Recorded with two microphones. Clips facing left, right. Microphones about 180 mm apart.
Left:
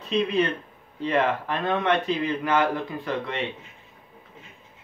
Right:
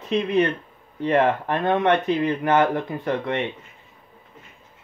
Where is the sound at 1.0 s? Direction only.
50° right (ahead or behind).